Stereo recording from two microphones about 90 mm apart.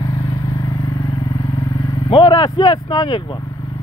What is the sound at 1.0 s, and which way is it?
Vehicle, 40° left (ahead or behind).